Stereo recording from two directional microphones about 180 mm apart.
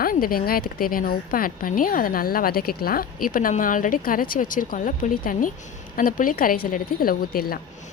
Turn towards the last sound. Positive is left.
turn(degrees=55)  # may be behind; listen again after turning